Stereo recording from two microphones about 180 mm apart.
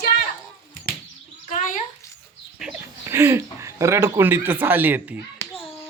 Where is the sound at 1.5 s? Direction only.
50° left (ahead or behind).